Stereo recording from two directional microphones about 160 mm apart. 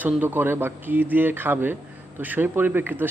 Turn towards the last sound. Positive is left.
turn(degrees=-10)  # may be behind; listen again after turning